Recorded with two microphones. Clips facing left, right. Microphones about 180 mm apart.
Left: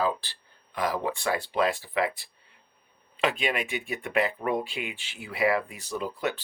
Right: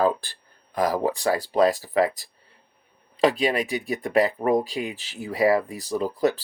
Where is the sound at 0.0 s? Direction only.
50° right (ahead or behind).